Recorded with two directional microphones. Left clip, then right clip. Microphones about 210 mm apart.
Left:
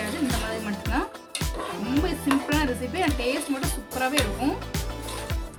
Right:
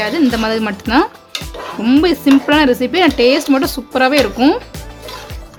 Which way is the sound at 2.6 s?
45° right (ahead or behind).